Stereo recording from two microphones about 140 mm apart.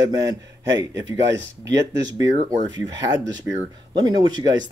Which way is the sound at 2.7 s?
25° right (ahead or behind).